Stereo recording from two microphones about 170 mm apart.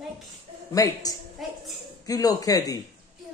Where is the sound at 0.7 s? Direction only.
20° left (ahead or behind).